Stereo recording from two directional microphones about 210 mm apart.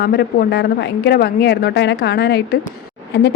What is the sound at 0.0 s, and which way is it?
A woman's voice, 50° left (ahead or behind).